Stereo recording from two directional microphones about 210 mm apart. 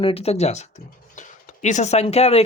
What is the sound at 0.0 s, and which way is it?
Speech, 30° left (ahead or behind).